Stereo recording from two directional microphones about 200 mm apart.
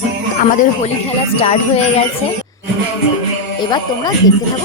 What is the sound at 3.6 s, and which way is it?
Speech, 20° left (ahead or behind).